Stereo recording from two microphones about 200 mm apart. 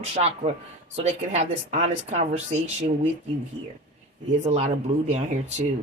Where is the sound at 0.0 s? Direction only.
30° right (ahead or behind).